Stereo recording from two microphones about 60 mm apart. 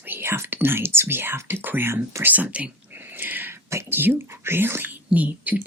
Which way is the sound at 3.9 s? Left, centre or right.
Right.